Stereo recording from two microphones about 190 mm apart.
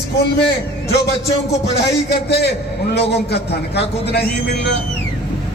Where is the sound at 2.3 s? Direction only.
60° left (ahead or behind).